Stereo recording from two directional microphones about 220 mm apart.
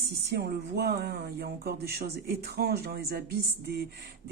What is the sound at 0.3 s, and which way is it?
Speech, 45° right (ahead or behind).